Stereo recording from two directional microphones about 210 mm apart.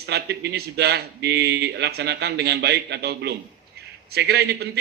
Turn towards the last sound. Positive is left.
turn(degrees=-50)  # may be behind; listen again after turning